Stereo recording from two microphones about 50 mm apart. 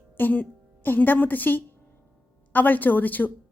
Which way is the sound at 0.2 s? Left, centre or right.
Left.